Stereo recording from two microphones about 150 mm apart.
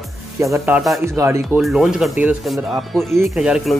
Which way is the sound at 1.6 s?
Centre (ahead or behind).